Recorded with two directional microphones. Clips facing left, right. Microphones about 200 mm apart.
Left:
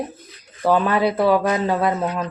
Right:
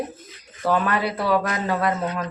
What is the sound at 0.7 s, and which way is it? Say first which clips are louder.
Speech: left 4 dB; 25° left (ahead or behind).